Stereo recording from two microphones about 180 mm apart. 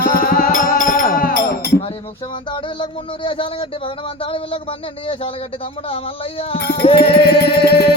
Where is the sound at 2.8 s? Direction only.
30° left (ahead or behind).